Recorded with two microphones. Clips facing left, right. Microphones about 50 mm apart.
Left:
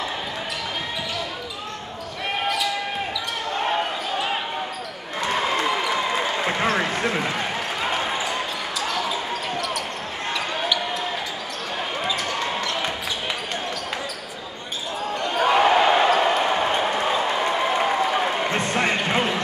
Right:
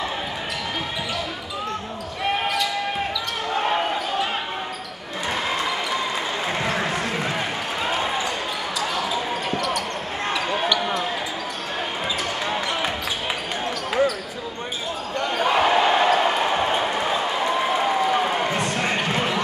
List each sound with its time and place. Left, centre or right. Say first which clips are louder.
10.3 s basketball bounce: right 2 dB; centre
15.3 s basketball bounce: left 2 dB; centre
18.6 s basketball bounce: left 1 dB; left